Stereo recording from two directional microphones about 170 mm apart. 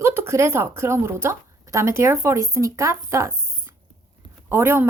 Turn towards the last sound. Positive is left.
turn(degrees=-15)  # may be behind; listen again after turning